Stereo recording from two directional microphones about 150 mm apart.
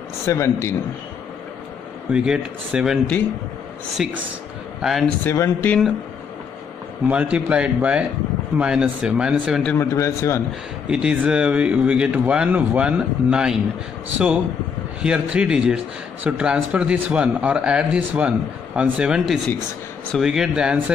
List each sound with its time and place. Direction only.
0.3 s a man's voice: 20° left (ahead or behind)
2.1 s speech: 5° right (ahead or behind)
5.2 s speech: 15° left (ahead or behind)
7.1 s speech: 10° right (ahead or behind)
9.7 s speech: 15° left (ahead or behind)
10.9 s speech: 5° right (ahead or behind)